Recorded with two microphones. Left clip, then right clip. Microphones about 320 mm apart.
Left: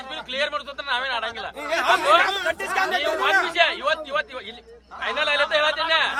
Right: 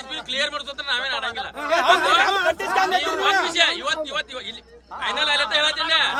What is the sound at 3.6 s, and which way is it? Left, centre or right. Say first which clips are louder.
A man's voice: even; centre.